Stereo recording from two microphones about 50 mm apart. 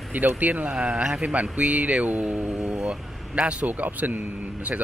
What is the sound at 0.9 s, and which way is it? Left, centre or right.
Speech, right.